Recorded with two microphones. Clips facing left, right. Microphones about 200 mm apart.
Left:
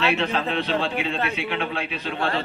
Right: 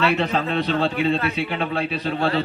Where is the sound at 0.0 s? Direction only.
35° right (ahead or behind).